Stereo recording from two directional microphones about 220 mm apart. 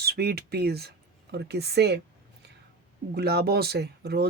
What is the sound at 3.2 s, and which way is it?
Speech, 45° right (ahead or behind).